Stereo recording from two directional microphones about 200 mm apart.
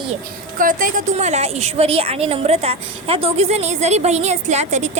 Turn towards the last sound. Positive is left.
turn(degrees=-35)  # may be behind; listen again after turning